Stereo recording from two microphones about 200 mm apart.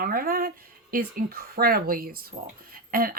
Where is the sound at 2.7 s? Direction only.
45° right (ahead or behind).